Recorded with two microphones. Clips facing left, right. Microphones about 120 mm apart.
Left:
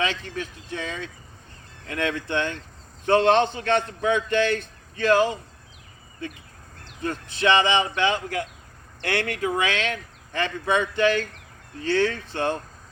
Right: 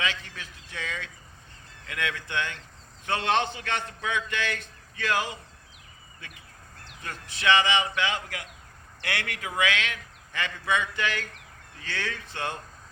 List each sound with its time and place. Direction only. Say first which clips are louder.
0.0 s a man's voice: left 6 dB; 30° left (ahead or behind)
7.0 s a man's voice: left 6 dB; 30° left (ahead or behind)